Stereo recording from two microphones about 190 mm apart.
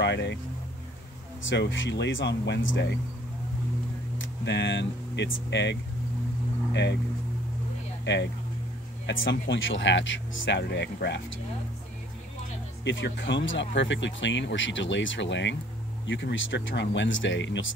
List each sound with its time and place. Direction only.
0.0 s speech: 65° left (ahead or behind)
1.5 s speech: 75° left (ahead or behind)
4.2 s speech: 70° left (ahead or behind)
8.0 s speech: 65° left (ahead or behind)
9.0 s speech: 80° left; by 11.2 s 65° left (ahead or behind)
12.8 s speech: 70° left (ahead or behind)